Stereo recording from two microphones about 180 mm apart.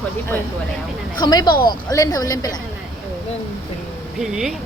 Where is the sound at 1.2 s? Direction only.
25° left (ahead or behind).